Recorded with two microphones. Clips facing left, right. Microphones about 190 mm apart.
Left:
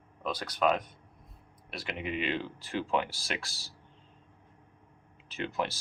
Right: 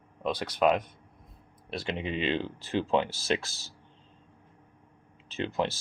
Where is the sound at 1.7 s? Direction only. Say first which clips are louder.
Right 3 dB; 25° right (ahead or behind).